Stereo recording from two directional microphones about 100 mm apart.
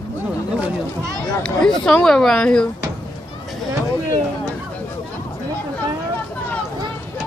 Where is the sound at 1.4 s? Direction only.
10° left (ahead or behind).